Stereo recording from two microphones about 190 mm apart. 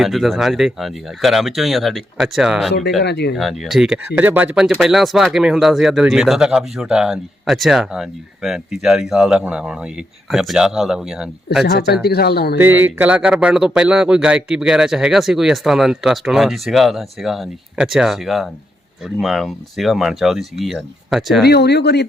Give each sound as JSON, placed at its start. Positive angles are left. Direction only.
{"t": 0.0, "sound": "speech", "side_deg": 0}
{"t": 3.0, "sound": "speech", "side_deg": 60}
{"t": 3.3, "sound": "speech", "side_deg": 0}
{"t": 11.6, "sound": "speech", "side_deg": 60}
{"t": 12.5, "sound": "speech", "side_deg": -10}
{"t": 21.4, "sound": "speech", "side_deg": 60}